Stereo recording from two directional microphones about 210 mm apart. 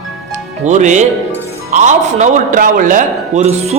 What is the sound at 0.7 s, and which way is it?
Speech, 35° right (ahead or behind).